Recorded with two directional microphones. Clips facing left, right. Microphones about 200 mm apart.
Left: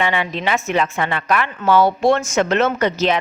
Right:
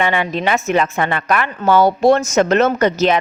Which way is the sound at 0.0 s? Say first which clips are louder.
Right 3 dB; 50° right (ahead or behind).